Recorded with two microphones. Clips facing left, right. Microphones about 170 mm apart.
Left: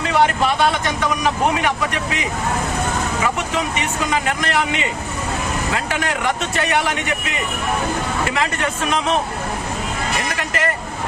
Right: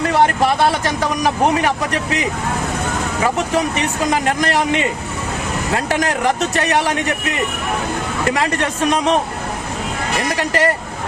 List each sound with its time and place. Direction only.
0.1 s speech: 40° right (ahead or behind)
3.2 s speech: 40° right (ahead or behind)
8.3 s speech: 40° right (ahead or behind)
10.3 s speech: 35° right (ahead or behind)